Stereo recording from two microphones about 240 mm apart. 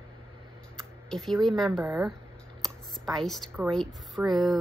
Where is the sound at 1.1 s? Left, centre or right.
Centre.